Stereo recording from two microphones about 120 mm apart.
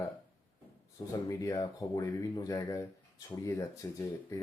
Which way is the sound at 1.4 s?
30° left (ahead or behind).